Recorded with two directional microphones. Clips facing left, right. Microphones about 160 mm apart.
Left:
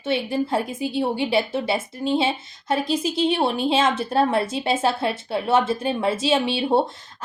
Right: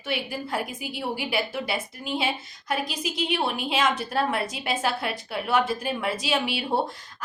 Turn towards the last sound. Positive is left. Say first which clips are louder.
# left 6 dB
turn(degrees=25)  # may be behind; listen again after turning